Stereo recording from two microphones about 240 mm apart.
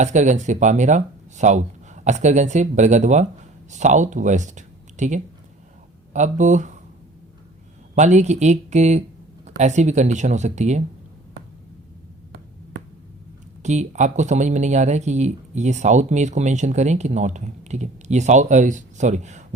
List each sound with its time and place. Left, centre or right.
0.0 s speech: right
7.9 s speech: right
13.6 s speech: right